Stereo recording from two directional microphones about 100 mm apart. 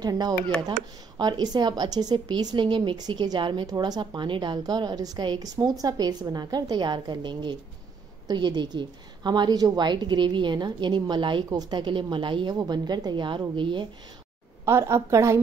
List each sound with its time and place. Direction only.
0.0 s speech: 40° right (ahead or behind)
14.6 s a woman's voice: 25° right (ahead or behind)